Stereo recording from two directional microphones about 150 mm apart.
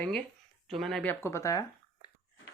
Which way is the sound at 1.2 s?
20° left (ahead or behind).